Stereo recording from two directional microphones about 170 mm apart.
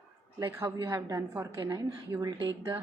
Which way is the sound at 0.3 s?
20° right (ahead or behind).